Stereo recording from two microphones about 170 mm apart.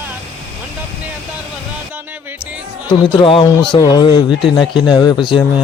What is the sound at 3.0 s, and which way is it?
Speech, 30° left (ahead or behind).